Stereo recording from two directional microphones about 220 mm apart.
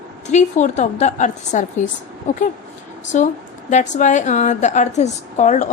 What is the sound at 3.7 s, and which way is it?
A woman's voice, 35° left (ahead or behind).